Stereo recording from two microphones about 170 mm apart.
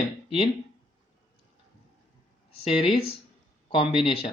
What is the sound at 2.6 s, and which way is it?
Speech, 35° left (ahead or behind).